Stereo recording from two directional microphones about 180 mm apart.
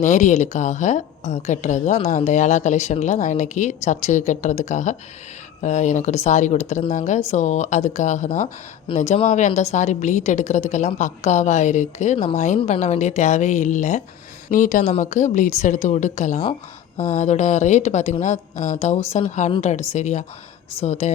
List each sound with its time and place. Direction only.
0.0 s a woman's voice: 40° left (ahead or behind)